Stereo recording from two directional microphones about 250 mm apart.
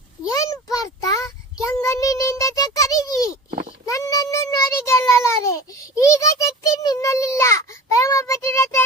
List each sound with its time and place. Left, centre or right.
0.3 s child singing: centre
3.5 s a sound: right
3.8 s meow: centre
6.1 s child singing: centre